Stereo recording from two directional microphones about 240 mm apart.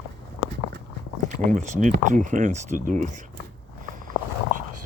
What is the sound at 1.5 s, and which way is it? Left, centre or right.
Speech, right.